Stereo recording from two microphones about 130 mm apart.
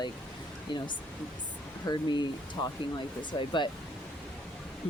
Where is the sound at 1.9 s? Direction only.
35° left (ahead or behind).